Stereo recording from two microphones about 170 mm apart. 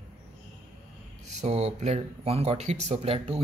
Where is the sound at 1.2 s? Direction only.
40° right (ahead or behind).